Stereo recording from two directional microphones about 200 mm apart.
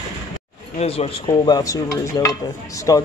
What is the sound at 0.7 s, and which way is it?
Dishes, 30° left (ahead or behind).